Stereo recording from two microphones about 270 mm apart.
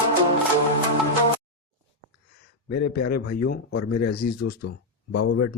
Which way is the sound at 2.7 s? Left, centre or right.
Left.